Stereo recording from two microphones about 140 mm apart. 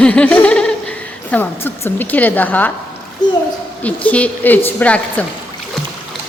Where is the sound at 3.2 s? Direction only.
30° left (ahead or behind).